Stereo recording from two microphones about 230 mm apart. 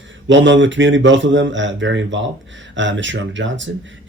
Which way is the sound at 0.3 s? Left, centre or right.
Right.